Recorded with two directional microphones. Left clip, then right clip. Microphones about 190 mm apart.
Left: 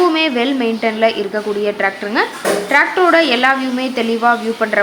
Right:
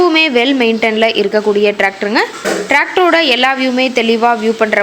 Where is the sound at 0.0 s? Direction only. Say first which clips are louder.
Right 4 dB; 20° right (ahead or behind).